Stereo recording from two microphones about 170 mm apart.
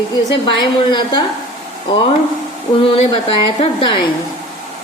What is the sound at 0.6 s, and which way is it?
Speech, 25° left (ahead or behind).